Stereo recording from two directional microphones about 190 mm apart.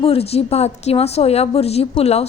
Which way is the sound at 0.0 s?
30° left (ahead or behind).